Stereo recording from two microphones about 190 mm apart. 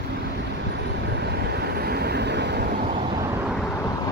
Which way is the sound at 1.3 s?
55° right (ahead or behind).